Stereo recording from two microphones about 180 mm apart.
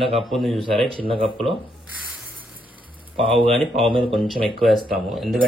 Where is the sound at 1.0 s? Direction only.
30° right (ahead or behind).